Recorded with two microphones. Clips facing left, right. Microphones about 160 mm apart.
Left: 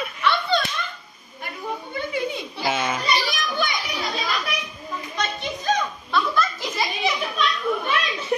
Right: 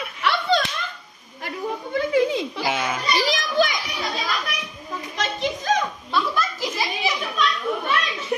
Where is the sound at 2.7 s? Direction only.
10° right (ahead or behind).